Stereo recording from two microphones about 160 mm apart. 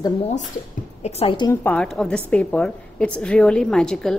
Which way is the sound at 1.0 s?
35° left (ahead or behind).